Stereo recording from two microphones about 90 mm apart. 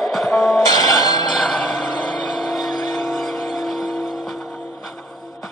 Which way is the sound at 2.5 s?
Centre (ahead or behind).